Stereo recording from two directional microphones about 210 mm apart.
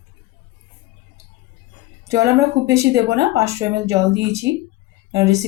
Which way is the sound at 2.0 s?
15° right (ahead or behind).